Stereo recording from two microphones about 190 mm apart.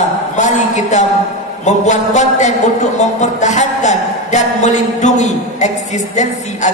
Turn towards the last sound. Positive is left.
turn(degrees=40)  # may be behind; listen again after turning